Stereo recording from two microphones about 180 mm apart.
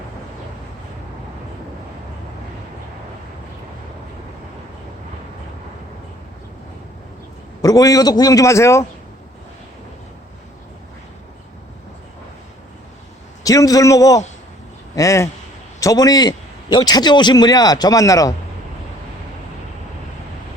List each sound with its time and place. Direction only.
7.6 s a man's voice: 20° left (ahead or behind)
13.4 s a man's voice: 20° left (ahead or behind)